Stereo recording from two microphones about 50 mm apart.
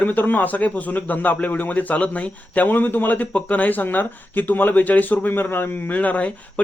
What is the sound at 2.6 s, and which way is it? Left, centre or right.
Speech, left.